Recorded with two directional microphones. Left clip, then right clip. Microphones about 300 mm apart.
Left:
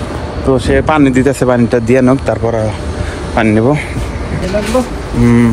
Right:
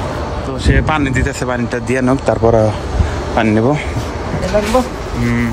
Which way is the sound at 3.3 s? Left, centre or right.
Centre.